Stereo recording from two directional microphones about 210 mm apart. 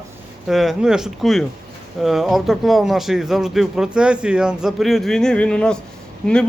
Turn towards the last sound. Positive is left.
turn(degrees=5)  # may be behind; listen again after turning